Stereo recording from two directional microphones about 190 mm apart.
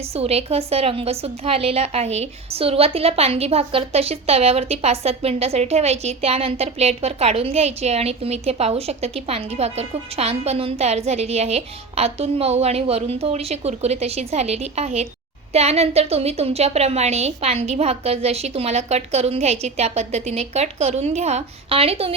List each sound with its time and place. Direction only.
0.0 s a woman's voice: 30° right (ahead or behind)